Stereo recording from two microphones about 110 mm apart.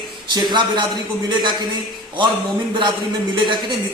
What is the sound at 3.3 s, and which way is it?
Speech, 45° right (ahead or behind).